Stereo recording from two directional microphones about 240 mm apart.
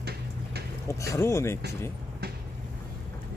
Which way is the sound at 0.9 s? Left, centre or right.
Centre.